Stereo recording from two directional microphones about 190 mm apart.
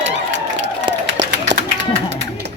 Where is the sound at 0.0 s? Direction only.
70° right (ahead or behind).